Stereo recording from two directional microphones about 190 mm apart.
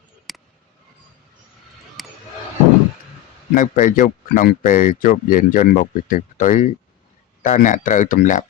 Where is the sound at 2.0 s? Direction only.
Centre (ahead or behind).